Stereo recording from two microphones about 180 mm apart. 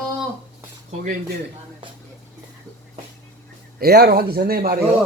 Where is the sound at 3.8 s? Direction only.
60° right (ahead or behind).